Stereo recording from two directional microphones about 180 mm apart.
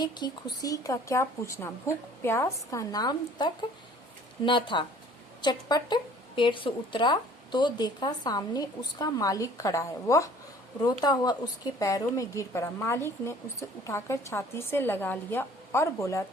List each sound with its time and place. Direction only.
0.0 s a woman's voice: 25° left (ahead or behind)